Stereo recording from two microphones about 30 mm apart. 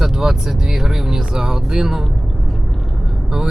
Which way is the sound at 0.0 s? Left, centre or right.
Centre.